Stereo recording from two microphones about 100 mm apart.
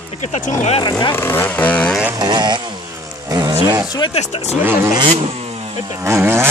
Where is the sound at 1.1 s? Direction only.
20° left (ahead or behind).